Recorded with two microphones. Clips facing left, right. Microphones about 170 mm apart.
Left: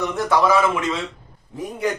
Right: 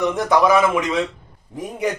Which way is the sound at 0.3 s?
15° right (ahead or behind).